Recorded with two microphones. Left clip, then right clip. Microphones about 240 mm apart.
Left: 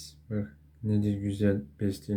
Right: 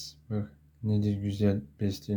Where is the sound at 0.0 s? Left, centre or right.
Centre.